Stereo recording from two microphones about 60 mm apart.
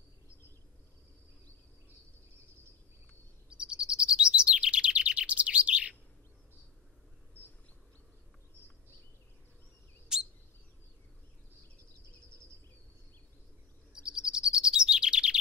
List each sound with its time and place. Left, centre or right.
3.4 s chirp: centre
7.4 s insect: left
10.1 s chirp: centre
13.9 s chirp: centre